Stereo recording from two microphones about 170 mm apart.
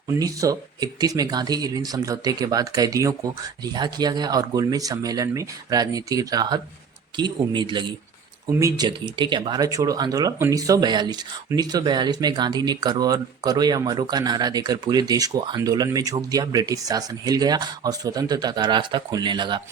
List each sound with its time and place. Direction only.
0.1 s speech: 20° right (ahead or behind)
8.4 s speech: 20° right (ahead or behind)